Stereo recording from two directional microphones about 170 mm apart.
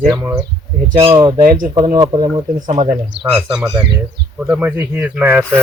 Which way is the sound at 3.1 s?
85° right.